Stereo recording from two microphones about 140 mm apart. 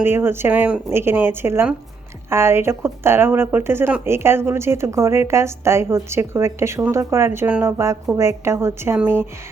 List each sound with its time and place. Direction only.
0.0 s speech: 15° right (ahead or behind)